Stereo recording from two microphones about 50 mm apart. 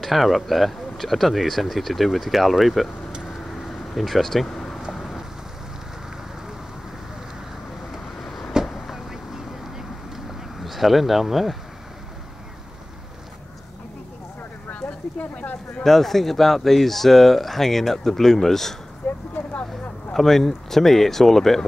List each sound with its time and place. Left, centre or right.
0.0 s speech: centre
3.6 s vehicle: centre
4.9 s rain: centre
7.9 s vehicle: centre
10.6 s speech: centre
14.7 s a sound: left
15.8 s speech: centre
19.0 s a sound: left
20.1 s speech: centre